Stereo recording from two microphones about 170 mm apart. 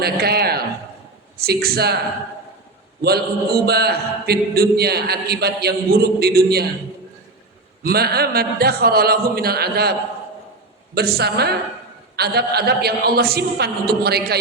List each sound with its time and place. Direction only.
0.0 s a sound: 65° right (ahead or behind)
1.5 s a man's voice: 65° right (ahead or behind)
3.0 s a man's voice: 65° right (ahead or behind)
7.9 s a man's voice: 65° right (ahead or behind)
10.9 s a man's voice: 70° right (ahead or behind)